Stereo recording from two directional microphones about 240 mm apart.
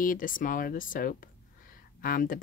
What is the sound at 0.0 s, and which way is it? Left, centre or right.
Speech, left.